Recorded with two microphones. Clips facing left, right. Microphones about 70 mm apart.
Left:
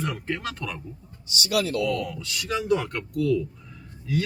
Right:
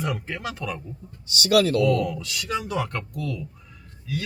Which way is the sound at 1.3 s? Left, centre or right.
Right.